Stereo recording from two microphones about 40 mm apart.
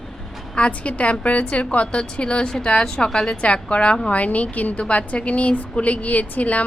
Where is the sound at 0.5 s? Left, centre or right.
Left.